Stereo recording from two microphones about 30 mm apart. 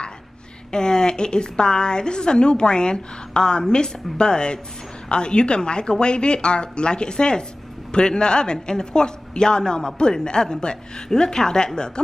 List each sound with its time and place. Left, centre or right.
0.7 s a woman's voice: left